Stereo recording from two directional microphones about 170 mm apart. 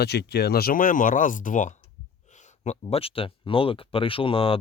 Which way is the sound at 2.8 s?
35° left (ahead or behind).